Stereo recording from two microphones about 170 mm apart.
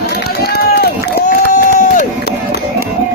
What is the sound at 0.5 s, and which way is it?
Run, 70° left (ahead or behind).